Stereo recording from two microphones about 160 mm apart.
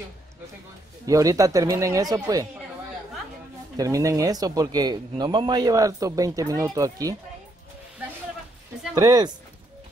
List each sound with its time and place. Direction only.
1.0 s speech: 20° right (ahead or behind)
3.7 s speech: 20° right (ahead or behind)
8.9 s speech: 25° right (ahead or behind)